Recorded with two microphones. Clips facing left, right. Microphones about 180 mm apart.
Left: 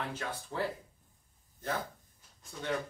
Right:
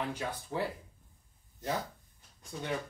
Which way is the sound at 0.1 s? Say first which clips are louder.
Right 2 dB; 15° right (ahead or behind).